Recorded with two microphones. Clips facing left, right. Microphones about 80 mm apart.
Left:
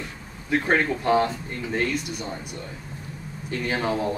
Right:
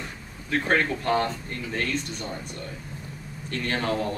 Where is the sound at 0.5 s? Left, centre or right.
Centre.